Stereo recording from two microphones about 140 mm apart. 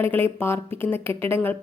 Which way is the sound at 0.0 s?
15° left (ahead or behind).